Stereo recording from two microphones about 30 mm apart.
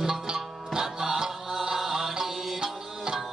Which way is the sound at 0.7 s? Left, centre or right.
Centre.